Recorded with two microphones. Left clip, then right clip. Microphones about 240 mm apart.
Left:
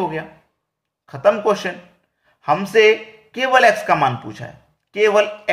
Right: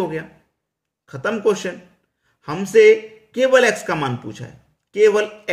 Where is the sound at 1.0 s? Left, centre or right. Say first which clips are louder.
Left 4 dB; centre.